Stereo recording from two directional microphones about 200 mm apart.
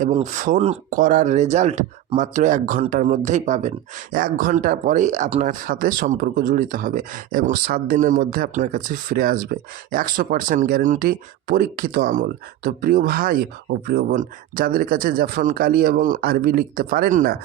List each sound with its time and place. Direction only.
0.0 s speech: 35° right (ahead or behind)